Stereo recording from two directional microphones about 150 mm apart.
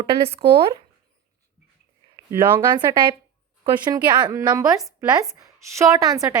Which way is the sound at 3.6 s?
30° right (ahead or behind).